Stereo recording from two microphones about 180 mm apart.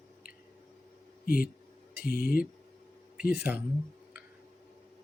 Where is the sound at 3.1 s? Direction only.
55° left (ahead or behind).